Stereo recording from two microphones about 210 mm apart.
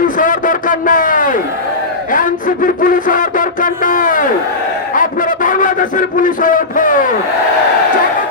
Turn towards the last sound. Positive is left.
turn(degrees=40)  # may be behind; listen again after turning